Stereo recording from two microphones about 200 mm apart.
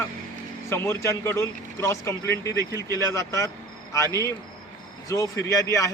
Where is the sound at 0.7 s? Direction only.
15° left (ahead or behind).